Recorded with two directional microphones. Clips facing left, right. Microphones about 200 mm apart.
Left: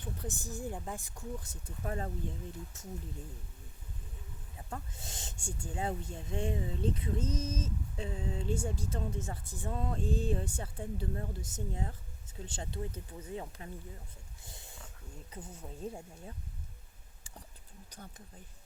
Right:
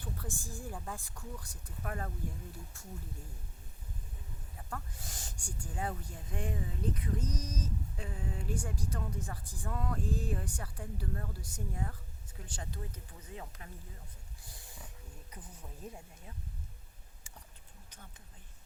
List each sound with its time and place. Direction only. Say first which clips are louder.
0.0 s speech: left 2 dB; 20° left (ahead or behind)
4.7 s speech: left 1 dB; 25° left (ahead or behind)
14.4 s a sound: left 3 dB; 25° left (ahead or behind)
15.3 s speech: left 7 dB; 25° left (ahead or behind)